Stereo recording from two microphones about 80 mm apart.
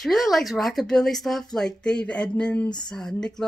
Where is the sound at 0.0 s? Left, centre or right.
Centre.